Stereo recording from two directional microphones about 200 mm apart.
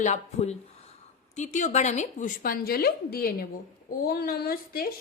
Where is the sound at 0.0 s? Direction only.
35° left (ahead or behind).